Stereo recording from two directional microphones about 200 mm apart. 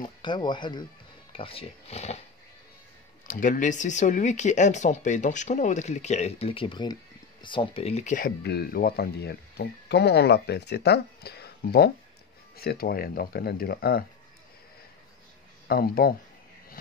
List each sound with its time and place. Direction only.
0.0 s speech: 20° left (ahead or behind)
3.3 s speech: 40° left (ahead or behind)
8.4 s speech: 50° left (ahead or behind)
15.7 s speech: 50° left (ahead or behind)